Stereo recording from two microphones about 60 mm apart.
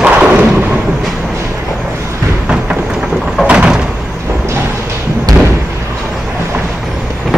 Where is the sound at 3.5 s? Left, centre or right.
Centre.